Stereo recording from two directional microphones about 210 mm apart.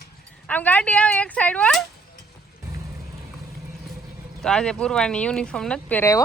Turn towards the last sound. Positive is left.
turn(degrees=10)  # may be behind; listen again after turning